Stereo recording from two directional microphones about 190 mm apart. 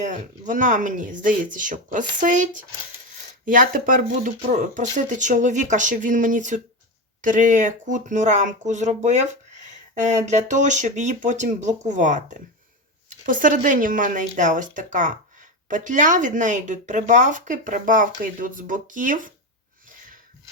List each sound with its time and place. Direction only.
0.0 s speech: 40° right (ahead or behind)